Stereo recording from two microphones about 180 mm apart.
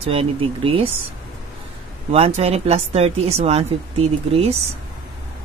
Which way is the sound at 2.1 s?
35° right (ahead or behind).